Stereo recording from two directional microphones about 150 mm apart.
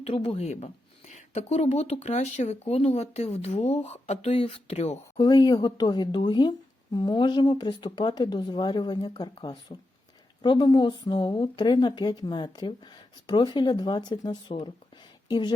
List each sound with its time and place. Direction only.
0.0 s speech: 40° left (ahead or behind)
5.1 s a woman's voice: 30° left (ahead or behind)